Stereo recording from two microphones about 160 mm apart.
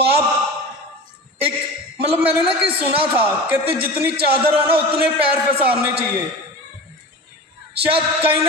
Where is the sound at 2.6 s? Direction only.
35° right (ahead or behind).